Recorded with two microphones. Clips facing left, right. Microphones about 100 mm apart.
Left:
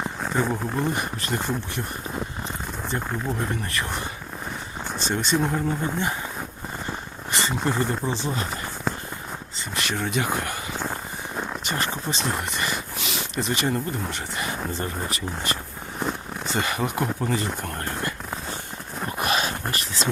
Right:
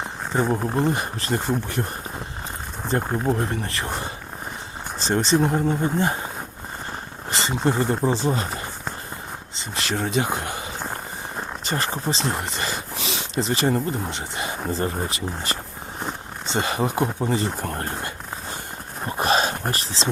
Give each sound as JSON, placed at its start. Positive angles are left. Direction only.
{"t": 0.4, "sound": "speech", "side_deg": -30}
{"t": 2.9, "sound": "speech", "side_deg": -40}
{"t": 7.3, "sound": "speech", "side_deg": -30}
{"t": 11.6, "sound": "speech", "side_deg": -35}
{"t": 19.0, "sound": "dog", "side_deg": -30}